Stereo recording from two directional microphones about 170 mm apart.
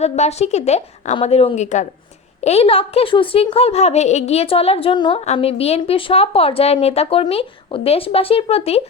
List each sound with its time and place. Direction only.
0.0 s a woman's voice: 40° left (ahead or behind)